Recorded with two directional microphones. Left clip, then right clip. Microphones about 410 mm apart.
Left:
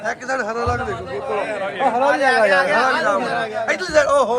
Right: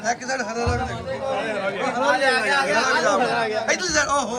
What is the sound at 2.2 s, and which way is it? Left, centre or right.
Speech, centre.